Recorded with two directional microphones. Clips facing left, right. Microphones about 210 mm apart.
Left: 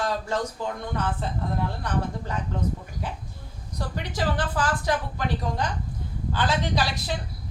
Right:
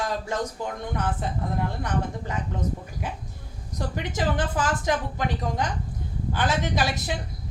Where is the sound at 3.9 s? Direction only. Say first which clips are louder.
Right 1 dB; 20° right (ahead or behind).